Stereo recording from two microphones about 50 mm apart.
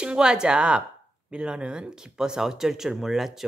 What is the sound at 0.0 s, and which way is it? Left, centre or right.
A man's voice, centre.